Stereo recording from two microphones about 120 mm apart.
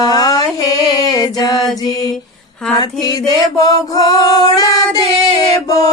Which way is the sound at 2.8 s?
35° left (ahead or behind).